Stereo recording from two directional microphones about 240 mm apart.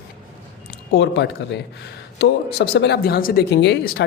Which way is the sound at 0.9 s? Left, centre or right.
Left.